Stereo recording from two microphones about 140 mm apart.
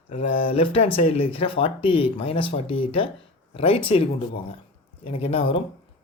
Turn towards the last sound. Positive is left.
turn(degrees=40)  # may be behind; listen again after turning